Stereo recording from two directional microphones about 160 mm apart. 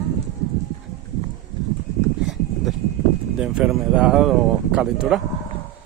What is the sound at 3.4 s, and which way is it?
Speech, 5° right (ahead or behind).